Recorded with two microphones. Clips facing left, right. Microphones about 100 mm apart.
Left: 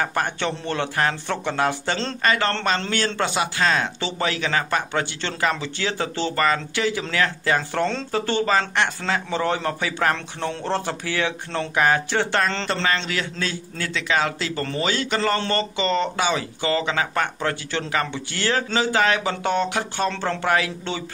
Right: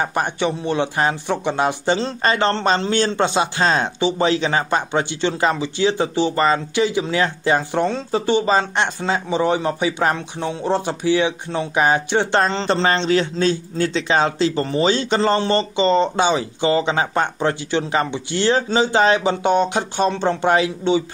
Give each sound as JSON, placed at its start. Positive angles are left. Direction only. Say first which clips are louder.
{"t": 0.0, "sound": "a man's voice", "louder": "right 3 dB", "side_deg": -20}